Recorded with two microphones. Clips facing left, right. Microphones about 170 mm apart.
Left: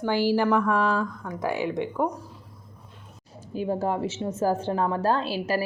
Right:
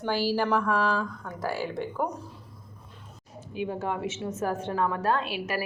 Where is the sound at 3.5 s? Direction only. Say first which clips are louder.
Left 4 dB; 35° left (ahead or behind).